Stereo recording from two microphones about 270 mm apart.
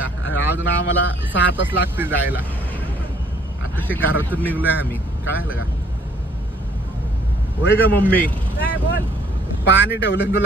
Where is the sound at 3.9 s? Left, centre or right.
Centre.